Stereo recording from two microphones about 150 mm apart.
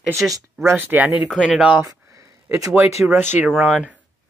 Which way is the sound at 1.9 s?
20° right (ahead or behind).